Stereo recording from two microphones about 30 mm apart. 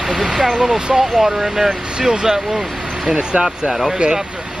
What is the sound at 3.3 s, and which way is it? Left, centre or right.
Speech, right.